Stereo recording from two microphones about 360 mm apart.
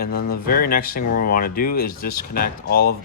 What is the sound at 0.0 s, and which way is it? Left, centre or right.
Speech, left.